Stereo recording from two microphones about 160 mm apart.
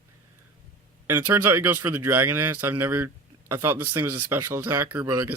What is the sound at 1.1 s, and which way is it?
Speech, 15° right (ahead or behind).